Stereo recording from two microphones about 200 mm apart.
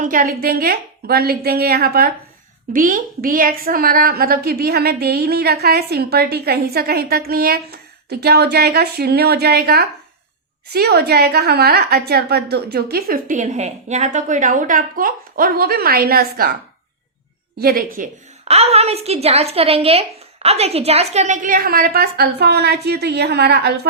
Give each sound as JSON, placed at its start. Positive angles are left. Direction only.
{"t": 0.0, "sound": "a woman's voice", "side_deg": -40}
{"t": 17.6, "sound": "a woman's voice", "side_deg": -50}